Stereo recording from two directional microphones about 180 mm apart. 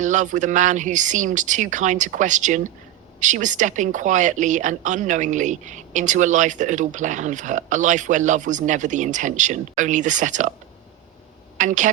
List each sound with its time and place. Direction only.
0.0 s a woman's voice: 45° right (ahead or behind)
11.5 s a woman's voice: 45° right (ahead or behind)